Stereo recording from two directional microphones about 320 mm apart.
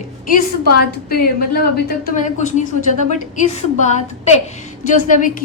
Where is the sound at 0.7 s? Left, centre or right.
Left.